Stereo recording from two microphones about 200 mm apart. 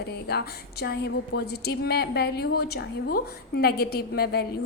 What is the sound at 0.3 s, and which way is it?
A woman's voice, 55° left (ahead or behind).